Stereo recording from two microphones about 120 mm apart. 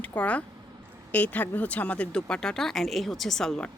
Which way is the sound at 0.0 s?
15° left (ahead or behind).